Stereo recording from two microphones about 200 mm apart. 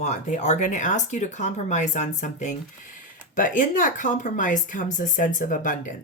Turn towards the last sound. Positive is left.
turn(degrees=40)  # may be behind; listen again after turning